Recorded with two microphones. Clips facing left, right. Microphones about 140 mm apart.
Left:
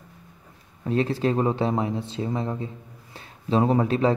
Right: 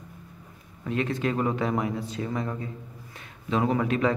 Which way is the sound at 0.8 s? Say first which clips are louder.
Left 4 dB; 35° left (ahead or behind).